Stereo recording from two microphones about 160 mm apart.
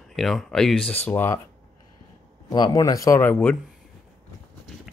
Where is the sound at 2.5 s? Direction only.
25° left (ahead or behind).